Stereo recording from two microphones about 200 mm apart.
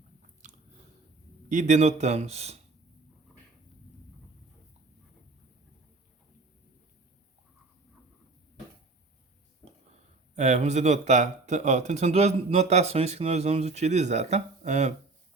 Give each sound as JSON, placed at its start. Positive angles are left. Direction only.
{"t": 0.4, "sound": "biting", "side_deg": -35}
{"t": 1.5, "sound": "speech", "side_deg": -40}
{"t": 10.3, "sound": "speech", "side_deg": -35}